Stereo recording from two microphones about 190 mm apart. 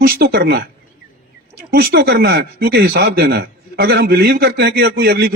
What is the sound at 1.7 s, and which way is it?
Speech, 55° right (ahead or behind).